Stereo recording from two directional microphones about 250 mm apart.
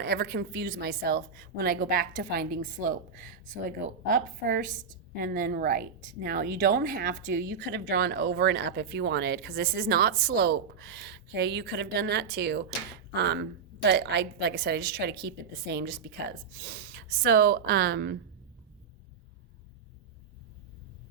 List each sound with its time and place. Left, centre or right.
0.0 s a woman's voice: right